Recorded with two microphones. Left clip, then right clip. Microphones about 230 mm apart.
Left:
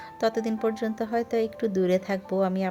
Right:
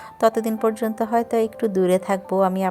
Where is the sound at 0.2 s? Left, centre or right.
Centre.